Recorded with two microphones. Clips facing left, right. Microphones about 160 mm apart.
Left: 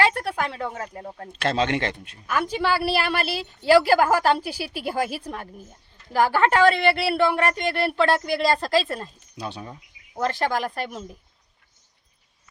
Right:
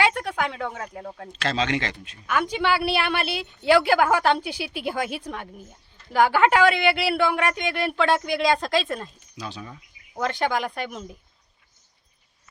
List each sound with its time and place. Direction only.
0.0 s a sound: centre (ahead or behind)
0.6 s a woman's voice: centre (ahead or behind)
1.4 s a man's voice: 55° left (ahead or behind)
2.2 s a woman's voice: centre (ahead or behind)
9.4 s a man's voice: 60° left (ahead or behind)
10.2 s a woman's voice: centre (ahead or behind)